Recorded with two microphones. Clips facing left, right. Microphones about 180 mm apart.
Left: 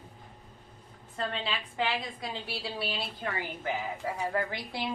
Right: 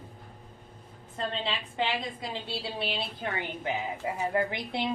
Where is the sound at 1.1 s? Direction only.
25° right (ahead or behind).